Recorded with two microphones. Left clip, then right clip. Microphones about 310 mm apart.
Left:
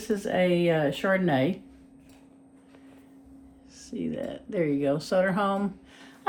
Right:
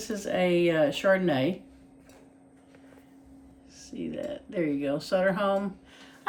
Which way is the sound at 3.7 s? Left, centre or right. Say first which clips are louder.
Left 2 dB; centre.